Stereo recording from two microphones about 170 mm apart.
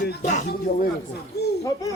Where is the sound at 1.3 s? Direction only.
70° left (ahead or behind).